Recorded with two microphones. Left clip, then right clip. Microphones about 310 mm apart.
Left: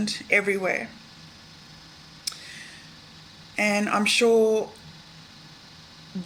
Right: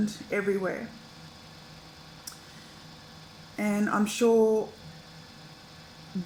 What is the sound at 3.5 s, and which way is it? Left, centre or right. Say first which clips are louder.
Speech: left 8 dB; left.